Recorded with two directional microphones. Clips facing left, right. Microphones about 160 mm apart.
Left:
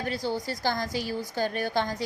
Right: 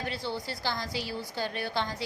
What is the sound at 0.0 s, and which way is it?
A woman's voice, 40° left (ahead or behind).